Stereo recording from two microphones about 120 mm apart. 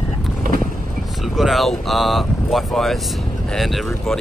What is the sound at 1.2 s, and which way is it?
Speech, 5° right (ahead or behind).